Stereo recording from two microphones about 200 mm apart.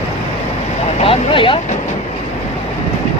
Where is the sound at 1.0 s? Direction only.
25° left (ahead or behind).